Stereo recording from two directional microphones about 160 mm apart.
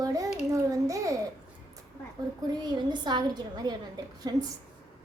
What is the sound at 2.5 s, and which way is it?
A woman's voice, 25° right (ahead or behind).